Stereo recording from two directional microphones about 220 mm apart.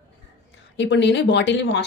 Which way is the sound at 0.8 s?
55° left (ahead or behind).